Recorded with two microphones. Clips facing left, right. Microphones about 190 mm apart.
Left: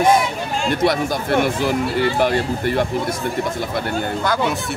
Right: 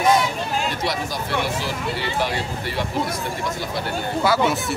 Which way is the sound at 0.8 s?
55° left (ahead or behind).